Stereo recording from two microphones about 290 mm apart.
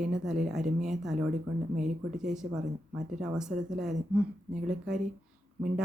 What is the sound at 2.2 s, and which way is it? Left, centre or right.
A woman's voice, centre.